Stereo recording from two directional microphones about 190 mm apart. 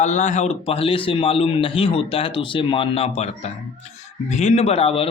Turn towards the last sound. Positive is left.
turn(degrees=30)  # may be behind; listen again after turning